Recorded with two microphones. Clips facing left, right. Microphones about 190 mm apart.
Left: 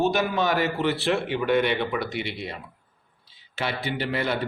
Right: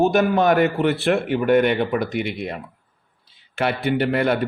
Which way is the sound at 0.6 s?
60° right (ahead or behind).